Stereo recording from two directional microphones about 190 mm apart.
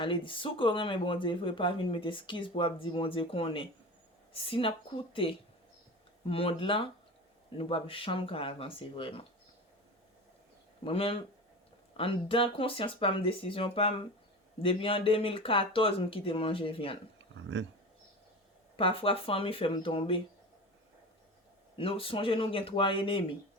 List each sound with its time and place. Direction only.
0.0 s speech: 25° left (ahead or behind)
10.8 s speech: 30° left (ahead or behind)
17.3 s speech: 80° right
18.8 s speech: 30° left (ahead or behind)
21.8 s speech: 30° left (ahead or behind)